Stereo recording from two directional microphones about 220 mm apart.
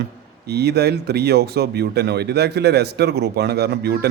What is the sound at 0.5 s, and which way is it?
Speech, 45° right (ahead or behind).